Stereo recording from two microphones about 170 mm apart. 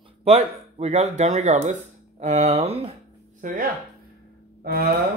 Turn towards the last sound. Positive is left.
turn(degrees=-65)  # may be behind; listen again after turning